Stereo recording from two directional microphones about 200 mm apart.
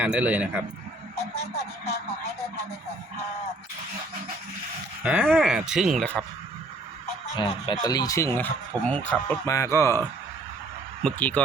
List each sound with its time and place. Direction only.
0.0 s a man's voice: 5° right (ahead or behind)
5.0 s speech: 10° right (ahead or behind)
7.3 s speech: 25° left (ahead or behind)
11.0 s speech: 5° left (ahead or behind)